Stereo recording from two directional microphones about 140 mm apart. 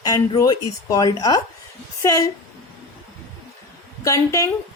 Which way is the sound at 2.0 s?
20° left (ahead or behind).